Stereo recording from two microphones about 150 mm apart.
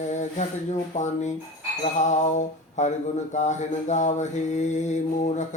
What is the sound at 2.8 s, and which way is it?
Mantra, 50° left (ahead or behind).